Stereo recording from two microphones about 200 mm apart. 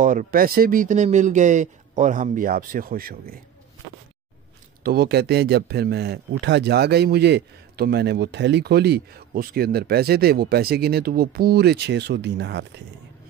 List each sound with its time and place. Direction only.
0.0 s speech: 40° right (ahead or behind)
4.8 s speech: 50° right (ahead or behind)